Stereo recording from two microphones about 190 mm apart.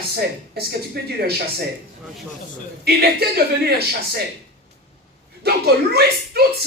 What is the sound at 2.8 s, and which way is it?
Speech, 60° right (ahead or behind).